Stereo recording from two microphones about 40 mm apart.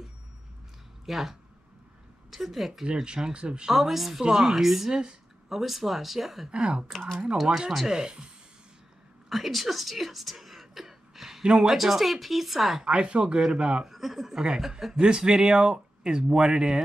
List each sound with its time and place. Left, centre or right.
1.0 s speech: centre
2.3 s speech: centre
2.8 s speech: right
3.7 s speech: centre
4.2 s speech: centre
6.5 s speech: centre
7.7 s speech: centre
8.0 s speech: right
9.3 s speech: centre
12.8 s speech: right
13.8 s speech: centre
15.0 s speech: right